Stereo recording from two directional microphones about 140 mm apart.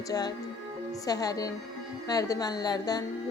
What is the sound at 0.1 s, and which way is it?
Speech, 25° left (ahead or behind).